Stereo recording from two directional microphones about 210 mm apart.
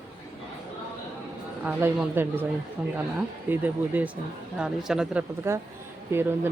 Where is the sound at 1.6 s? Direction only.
10° right (ahead or behind).